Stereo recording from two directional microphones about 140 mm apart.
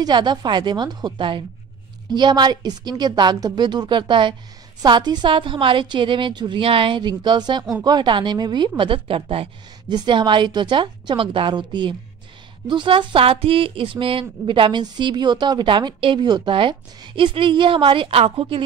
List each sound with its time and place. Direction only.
0.0 s speech: 30° right (ahead or behind)